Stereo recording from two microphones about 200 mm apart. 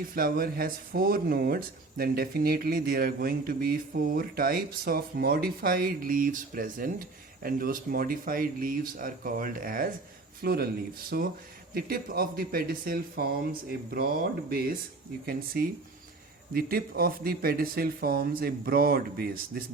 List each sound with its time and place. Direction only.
0.1 s speech: 45° right (ahead or behind)